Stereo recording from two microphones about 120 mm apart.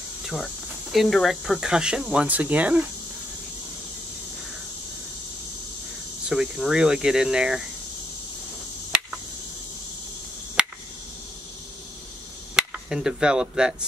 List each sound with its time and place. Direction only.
0.9 s speech: centre (ahead or behind)
6.2 s speech: 5° right (ahead or behind)
10.6 s finger snapping: 10° right (ahead or behind)
12.5 s speech: 5° right (ahead or behind)